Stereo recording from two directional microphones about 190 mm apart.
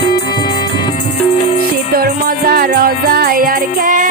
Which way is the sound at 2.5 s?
50° right (ahead or behind).